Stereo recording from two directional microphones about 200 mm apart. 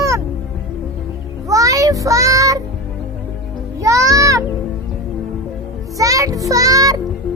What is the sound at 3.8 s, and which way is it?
Music, 15° right (ahead or behind).